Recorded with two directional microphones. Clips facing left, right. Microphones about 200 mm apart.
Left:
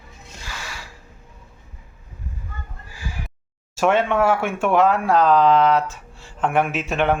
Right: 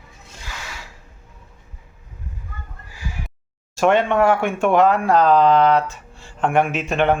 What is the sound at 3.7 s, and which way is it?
Speech, 5° left (ahead or behind).